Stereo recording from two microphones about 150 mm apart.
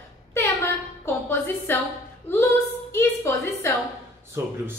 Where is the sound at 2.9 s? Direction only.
15° left (ahead or behind).